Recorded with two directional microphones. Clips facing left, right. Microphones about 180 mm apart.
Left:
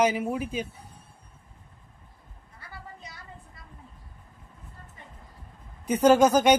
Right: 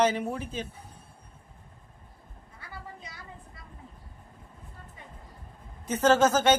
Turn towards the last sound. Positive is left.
turn(degrees=15)  # may be behind; listen again after turning